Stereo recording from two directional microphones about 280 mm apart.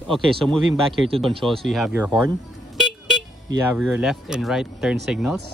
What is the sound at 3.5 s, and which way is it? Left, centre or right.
Speech, centre.